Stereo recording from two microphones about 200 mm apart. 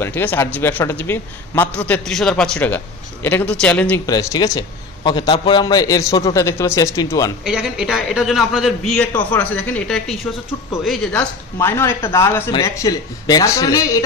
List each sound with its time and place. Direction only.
0.0 s a man's voice: 10° left (ahead or behind)
4.0 s a man's voice: 20° left (ahead or behind)
7.4 s a man's voice: centre (ahead or behind); by 14.0 s 15° left (ahead or behind)